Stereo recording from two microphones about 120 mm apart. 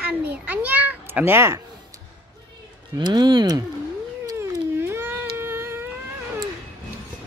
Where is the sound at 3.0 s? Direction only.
35° right (ahead or behind).